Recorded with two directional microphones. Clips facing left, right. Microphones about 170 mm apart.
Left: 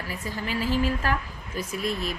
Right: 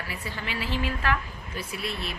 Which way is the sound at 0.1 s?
40° left (ahead or behind).